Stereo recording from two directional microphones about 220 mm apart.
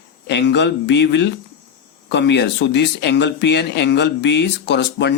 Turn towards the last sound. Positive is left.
turn(degrees=55)  # may be behind; listen again after turning